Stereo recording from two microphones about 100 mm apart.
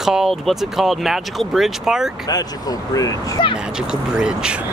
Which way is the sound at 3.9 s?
5° right (ahead or behind).